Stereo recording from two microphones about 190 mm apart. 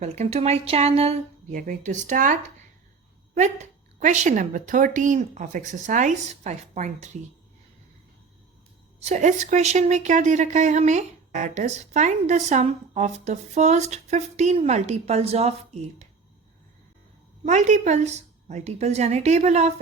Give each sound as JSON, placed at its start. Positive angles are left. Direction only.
{"t": 0.0, "sound": "speech", "side_deg": -35}
{"t": 3.3, "sound": "speech", "side_deg": -40}
{"t": 9.0, "sound": "speech", "side_deg": -35}
{"t": 17.4, "sound": "speech", "side_deg": -40}